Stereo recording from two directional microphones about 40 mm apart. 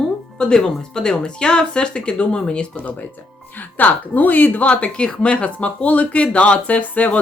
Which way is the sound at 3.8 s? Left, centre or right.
Left.